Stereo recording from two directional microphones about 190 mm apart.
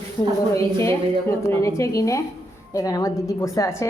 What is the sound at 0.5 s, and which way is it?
A woman's voice, 15° left (ahead or behind).